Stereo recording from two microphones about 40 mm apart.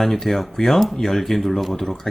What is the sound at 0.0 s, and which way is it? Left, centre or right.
Speech, centre.